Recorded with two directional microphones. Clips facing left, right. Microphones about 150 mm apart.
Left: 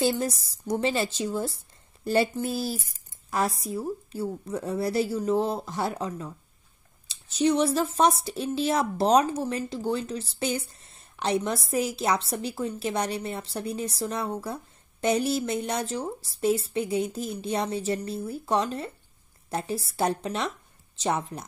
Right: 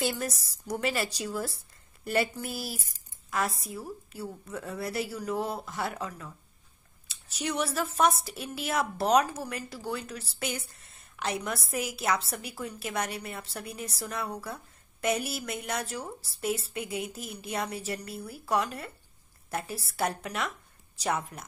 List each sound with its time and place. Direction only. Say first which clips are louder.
0.0 s a woman's voice: left 6 dB; 25° left (ahead or behind)